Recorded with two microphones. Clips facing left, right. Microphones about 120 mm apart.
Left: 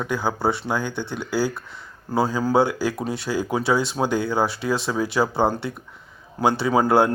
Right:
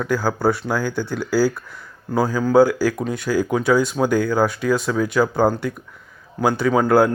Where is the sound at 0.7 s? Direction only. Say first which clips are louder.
Right 3 dB; 20° left (ahead or behind).